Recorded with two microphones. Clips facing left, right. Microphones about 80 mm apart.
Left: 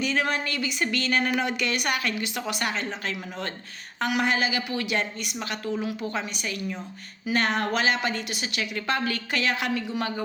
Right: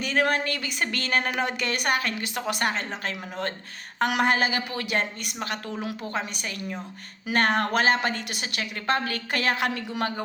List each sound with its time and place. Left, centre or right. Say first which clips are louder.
0.0 s a woman's voice: right 2 dB; right
5.8 s a woman's voice: left 2 dB; right
6.1 s a woman's voice: even; right